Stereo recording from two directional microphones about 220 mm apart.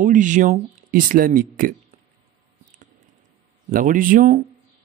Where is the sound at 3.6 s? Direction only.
40° right (ahead or behind).